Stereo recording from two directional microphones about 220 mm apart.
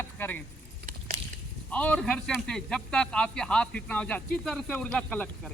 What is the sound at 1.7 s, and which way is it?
Speech, 5° left (ahead or behind).